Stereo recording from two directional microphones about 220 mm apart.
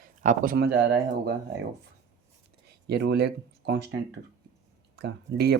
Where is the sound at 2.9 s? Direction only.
50° right (ahead or behind).